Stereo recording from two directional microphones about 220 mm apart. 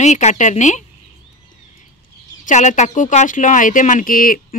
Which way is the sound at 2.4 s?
35° left (ahead or behind).